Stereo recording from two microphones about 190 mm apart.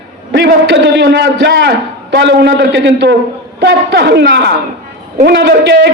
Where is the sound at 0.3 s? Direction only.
65° right (ahead or behind).